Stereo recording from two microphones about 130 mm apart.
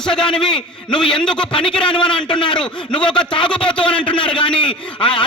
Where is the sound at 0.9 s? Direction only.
35° left (ahead or behind).